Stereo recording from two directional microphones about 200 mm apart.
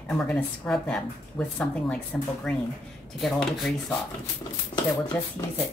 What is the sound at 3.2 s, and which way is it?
Speech, centre (ahead or behind).